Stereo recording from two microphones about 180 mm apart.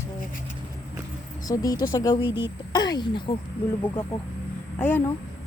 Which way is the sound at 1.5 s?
20° left (ahead or behind).